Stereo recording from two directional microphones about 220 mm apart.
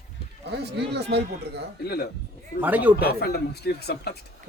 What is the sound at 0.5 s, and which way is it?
Speech, 50° right (ahead or behind).